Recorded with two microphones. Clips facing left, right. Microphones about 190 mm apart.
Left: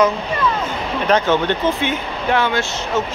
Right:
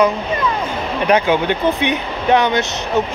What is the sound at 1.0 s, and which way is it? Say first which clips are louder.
Speech: right 1 dB; 15° right (ahead or behind).